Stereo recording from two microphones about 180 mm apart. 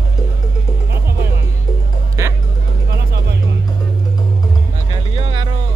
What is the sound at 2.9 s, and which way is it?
Music, 65° right (ahead or behind).